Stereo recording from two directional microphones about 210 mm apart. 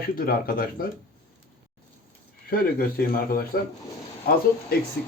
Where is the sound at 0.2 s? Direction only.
45° left (ahead or behind).